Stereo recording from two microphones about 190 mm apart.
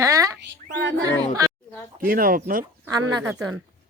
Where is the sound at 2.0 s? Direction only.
50° right (ahead or behind).